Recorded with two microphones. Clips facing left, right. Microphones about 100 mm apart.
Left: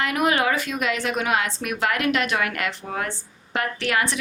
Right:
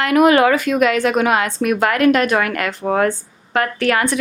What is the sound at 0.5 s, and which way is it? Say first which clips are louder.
Speech: right 9 dB; 55° right (ahead or behind).